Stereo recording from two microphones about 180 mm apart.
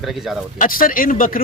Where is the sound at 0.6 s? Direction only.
50° left (ahead or behind).